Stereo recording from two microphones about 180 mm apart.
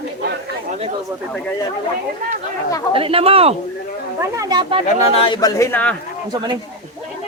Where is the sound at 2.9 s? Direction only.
30° right (ahead or behind).